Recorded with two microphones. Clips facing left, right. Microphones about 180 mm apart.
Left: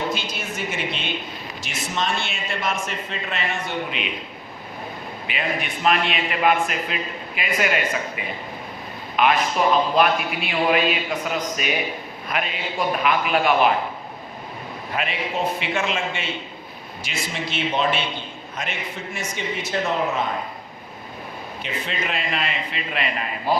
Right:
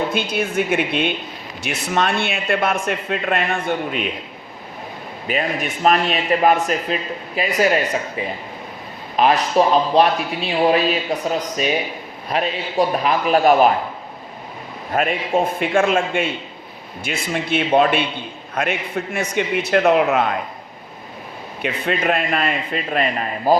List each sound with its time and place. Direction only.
0.1 s speech: 55° right (ahead or behind)
5.3 s a man's voice: 45° right (ahead or behind)
9.1 s a man's voice: 35° right (ahead or behind)
14.9 s a man's voice: 50° right (ahead or behind); by 20.3 s 70° right (ahead or behind)
21.6 s a man's voice: 55° right (ahead or behind)